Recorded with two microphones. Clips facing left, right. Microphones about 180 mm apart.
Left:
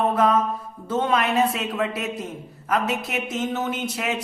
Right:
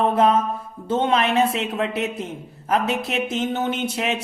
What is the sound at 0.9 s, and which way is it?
Speech, 25° right (ahead or behind).